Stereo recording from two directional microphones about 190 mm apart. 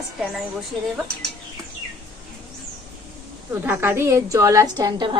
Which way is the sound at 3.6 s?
10° right (ahead or behind).